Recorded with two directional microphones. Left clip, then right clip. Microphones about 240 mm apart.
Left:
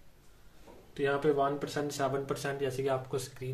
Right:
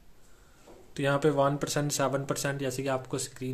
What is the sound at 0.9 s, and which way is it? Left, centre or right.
Speech, right.